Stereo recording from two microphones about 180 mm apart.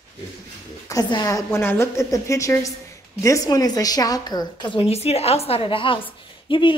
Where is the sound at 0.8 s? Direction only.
20° left (ahead or behind).